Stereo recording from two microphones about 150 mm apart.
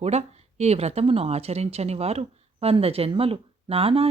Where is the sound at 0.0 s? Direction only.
45° right (ahead or behind).